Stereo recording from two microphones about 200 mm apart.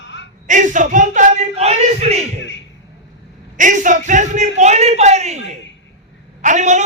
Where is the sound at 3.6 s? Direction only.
40° right (ahead or behind).